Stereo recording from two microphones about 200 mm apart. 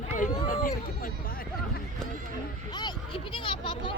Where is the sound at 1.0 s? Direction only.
45° left (ahead or behind).